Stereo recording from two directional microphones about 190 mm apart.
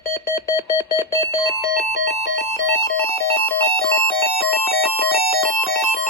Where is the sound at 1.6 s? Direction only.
60° left (ahead or behind).